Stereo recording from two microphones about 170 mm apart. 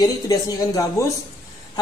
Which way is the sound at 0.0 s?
20° left (ahead or behind).